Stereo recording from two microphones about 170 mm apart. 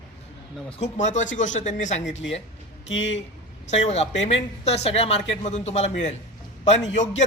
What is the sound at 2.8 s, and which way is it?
Speech, 90° left.